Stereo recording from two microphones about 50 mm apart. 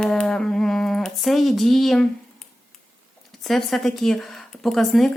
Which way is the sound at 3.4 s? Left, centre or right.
Centre.